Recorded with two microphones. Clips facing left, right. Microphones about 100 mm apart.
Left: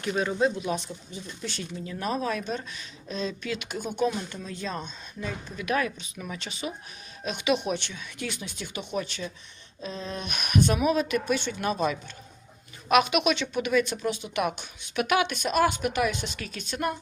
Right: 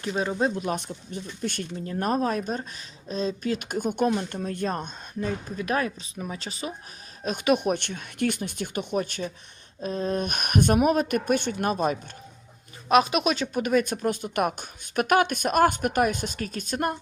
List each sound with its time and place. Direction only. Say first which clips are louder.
0.0 s speech: even; 30° right (ahead or behind); by 5.3 s 50° right (ahead or behind)
5.5 s speech: left 2 dB; 35° right (ahead or behind)
12.9 s speech: right 1 dB; 35° right (ahead or behind)